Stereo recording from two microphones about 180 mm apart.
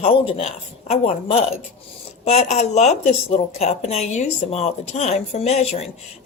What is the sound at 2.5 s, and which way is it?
A woman's voice, 40° left (ahead or behind).